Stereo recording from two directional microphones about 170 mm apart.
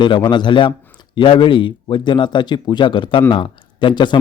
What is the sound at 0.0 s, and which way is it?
A man's voice, 25° left (ahead or behind).